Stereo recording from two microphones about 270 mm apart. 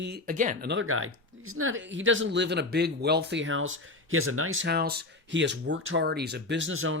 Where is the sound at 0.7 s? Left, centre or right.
Right.